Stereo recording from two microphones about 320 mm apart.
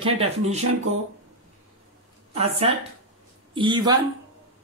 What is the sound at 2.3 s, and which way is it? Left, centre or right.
Speech, centre.